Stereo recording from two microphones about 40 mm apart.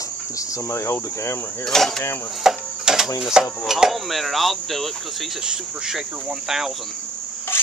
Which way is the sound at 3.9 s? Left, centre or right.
Centre.